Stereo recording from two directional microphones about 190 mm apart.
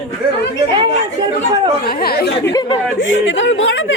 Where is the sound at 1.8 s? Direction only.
55° left (ahead or behind).